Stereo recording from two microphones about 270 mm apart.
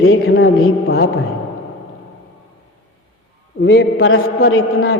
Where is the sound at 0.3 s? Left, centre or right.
Left.